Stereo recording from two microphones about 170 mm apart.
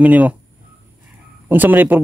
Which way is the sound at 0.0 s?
10° right (ahead or behind).